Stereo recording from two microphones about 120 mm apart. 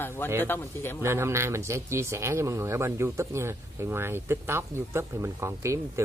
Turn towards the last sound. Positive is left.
turn(degrees=-25)  # may be behind; listen again after turning